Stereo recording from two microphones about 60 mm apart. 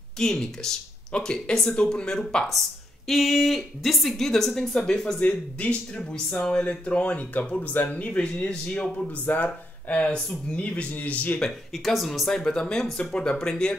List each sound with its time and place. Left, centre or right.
0.2 s a woman's voice: centre
5.2 s speech: left
9.2 s speech: left
11.4 s speech: centre